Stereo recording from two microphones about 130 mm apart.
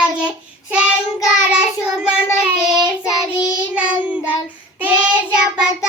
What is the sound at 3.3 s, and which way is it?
Child singing, 35° left (ahead or behind).